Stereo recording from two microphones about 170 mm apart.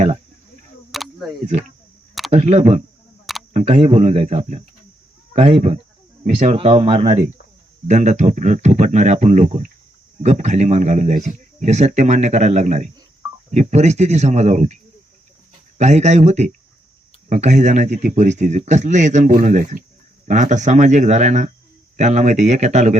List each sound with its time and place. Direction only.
0.9 s a sound: centre (ahead or behind)
2.3 s a man's voice: 40° right (ahead or behind)
15.8 s a man's voice: 40° right (ahead or behind)